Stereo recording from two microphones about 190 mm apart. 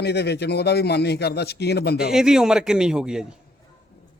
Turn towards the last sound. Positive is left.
turn(degrees=-5)  # may be behind; listen again after turning